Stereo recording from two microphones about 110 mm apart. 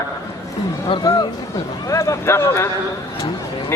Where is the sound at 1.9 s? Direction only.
25° left (ahead or behind).